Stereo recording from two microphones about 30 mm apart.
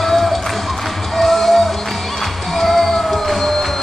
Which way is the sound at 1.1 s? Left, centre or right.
Centre.